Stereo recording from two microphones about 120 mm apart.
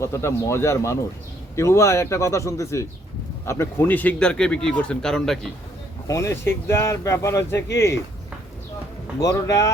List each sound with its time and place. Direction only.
0.0 s a man's voice: 25° left (ahead or behind); by 5.4 s 5° left (ahead or behind)
6.1 s speech: 25° left (ahead or behind)
9.2 s speech: 25° left (ahead or behind)